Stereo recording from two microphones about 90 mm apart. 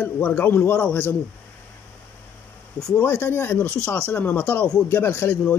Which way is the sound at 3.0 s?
25° left (ahead or behind).